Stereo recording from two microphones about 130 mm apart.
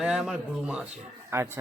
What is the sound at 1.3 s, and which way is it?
Speech, 20° right (ahead or behind).